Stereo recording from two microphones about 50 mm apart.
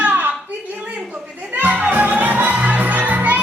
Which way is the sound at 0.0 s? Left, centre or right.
Right.